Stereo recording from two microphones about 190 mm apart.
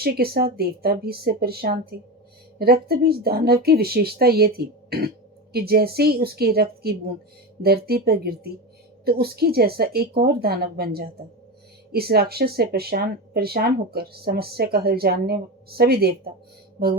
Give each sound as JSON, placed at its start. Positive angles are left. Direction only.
{"t": 0.0, "sound": "speech", "side_deg": -55}